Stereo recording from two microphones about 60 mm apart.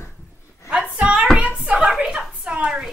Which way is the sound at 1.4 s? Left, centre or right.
Right.